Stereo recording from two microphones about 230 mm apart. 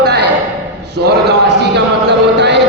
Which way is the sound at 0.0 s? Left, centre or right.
Right.